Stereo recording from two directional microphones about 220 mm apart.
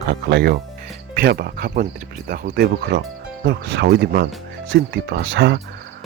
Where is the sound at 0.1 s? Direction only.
50° right (ahead or behind).